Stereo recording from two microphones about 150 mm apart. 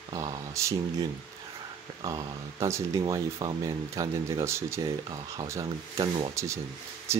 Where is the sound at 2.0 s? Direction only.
25° right (ahead or behind).